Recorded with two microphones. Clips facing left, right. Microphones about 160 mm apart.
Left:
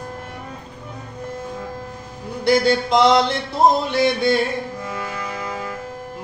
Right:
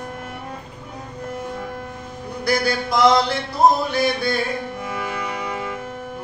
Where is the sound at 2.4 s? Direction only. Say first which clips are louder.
Left 5 dB; 25° left (ahead or behind).